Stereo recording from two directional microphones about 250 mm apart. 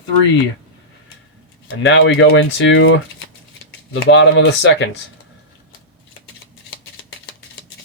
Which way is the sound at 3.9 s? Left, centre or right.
Left.